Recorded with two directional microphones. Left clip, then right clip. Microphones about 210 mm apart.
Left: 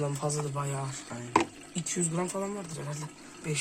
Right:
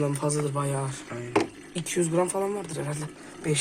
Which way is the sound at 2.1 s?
25° right (ahead or behind).